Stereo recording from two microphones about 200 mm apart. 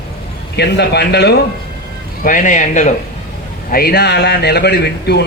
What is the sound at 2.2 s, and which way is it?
Speech, 40° left (ahead or behind).